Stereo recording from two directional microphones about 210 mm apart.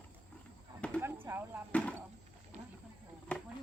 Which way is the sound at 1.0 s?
10° right (ahead or behind).